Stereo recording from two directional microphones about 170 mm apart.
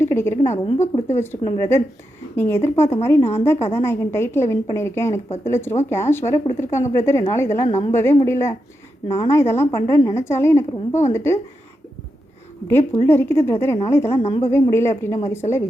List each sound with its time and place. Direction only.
0.0 s a woman's voice: 15° left (ahead or behind)
0.7 s speech: 35° left (ahead or behind)
1.0 s a woman's voice: 15° left (ahead or behind)
3.2 s speech: 35° left (ahead or behind)
3.8 s a woman's voice: 15° left (ahead or behind)
7.7 s speech: 35° left (ahead or behind)
8.2 s a woman's voice: 15° left (ahead or behind)
12.6 s a woman's voice: 15° left (ahead or behind)
14.1 s speech: 35° left (ahead or behind)
14.5 s a woman's voice: 15° left (ahead or behind)